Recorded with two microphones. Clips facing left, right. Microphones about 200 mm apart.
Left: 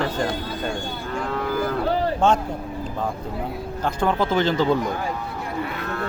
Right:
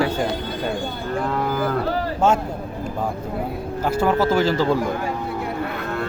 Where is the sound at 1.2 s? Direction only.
50° right (ahead or behind).